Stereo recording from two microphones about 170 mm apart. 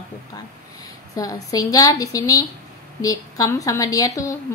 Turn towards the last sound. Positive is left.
turn(degrees=20)  # may be behind; listen again after turning